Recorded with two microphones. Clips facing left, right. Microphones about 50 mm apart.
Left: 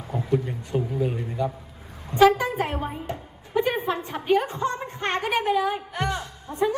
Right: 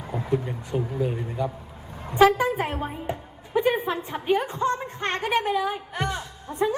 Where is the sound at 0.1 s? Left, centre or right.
Centre.